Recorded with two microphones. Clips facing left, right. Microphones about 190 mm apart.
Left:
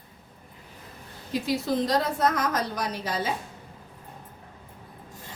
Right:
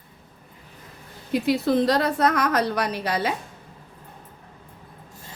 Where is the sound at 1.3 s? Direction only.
60° right (ahead or behind).